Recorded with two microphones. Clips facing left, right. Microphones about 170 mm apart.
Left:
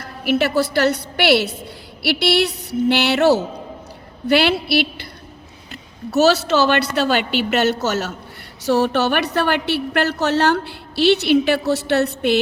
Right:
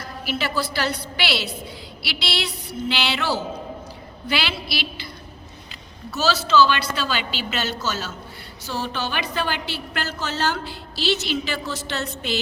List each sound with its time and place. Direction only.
0.0 s a woman's voice: 60° left (ahead or behind)
6.1 s a woman's voice: 65° left (ahead or behind)